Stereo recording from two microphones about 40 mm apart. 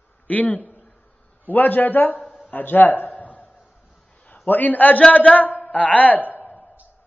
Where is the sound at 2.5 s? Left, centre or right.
Left.